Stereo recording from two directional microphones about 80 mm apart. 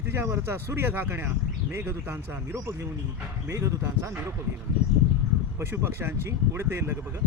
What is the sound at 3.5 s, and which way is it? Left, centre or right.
Speech, right.